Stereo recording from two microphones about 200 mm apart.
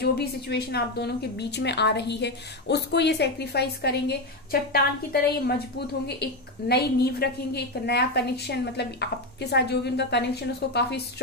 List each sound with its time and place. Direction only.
0.0 s a woman's voice: 55° left (ahead or behind)